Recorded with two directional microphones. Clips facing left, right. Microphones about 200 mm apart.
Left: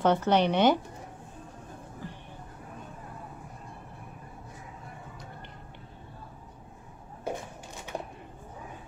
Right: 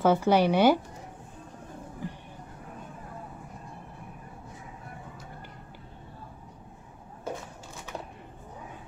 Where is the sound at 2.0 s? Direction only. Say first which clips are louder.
Right 5 dB; 15° right (ahead or behind).